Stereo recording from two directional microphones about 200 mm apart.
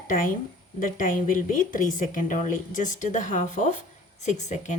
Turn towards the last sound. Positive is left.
turn(degrees=35)  # may be behind; listen again after turning